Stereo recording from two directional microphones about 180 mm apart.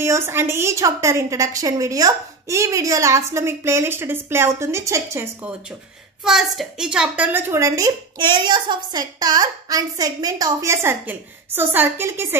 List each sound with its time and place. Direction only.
0.0 s a woman's voice: 15° right (ahead or behind)
6.2 s a woman's voice: centre (ahead or behind)